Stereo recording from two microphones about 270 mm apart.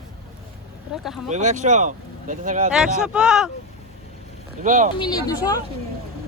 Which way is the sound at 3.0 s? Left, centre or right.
Centre.